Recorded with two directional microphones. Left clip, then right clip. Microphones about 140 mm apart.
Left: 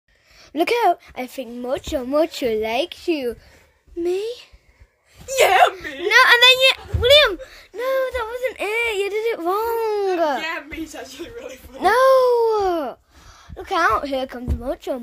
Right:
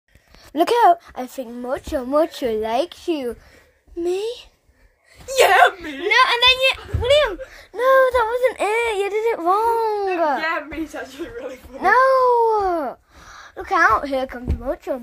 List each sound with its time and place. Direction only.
0.6 s speech: centre (ahead or behind)
1.1 s a woman's voice: 20° left (ahead or behind)
4.0 s speech: centre (ahead or behind)
5.2 s speech: 15° right (ahead or behind)
5.8 s speech: 35° left (ahead or behind)
7.7 s speech: 20° right (ahead or behind)
8.8 s speech: 5° left (ahead or behind)
9.6 s a woman's voice: 30° left (ahead or behind)
10.7 s speech: 50° left (ahead or behind)
11.8 s a woman's voice: 35° left (ahead or behind)
13.7 s speech: 15° left (ahead or behind)
14.6 s speech: 30° left (ahead or behind)